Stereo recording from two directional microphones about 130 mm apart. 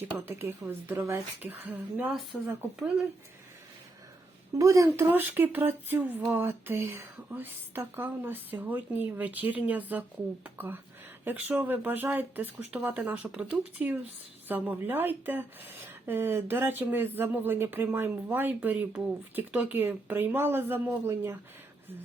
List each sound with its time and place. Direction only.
0.0 s speech: 15° right (ahead or behind)
4.5 s speech: 25° right (ahead or behind)